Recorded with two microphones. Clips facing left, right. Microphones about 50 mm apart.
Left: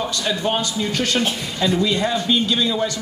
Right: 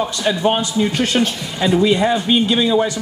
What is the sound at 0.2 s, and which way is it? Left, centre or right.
A man's voice, centre.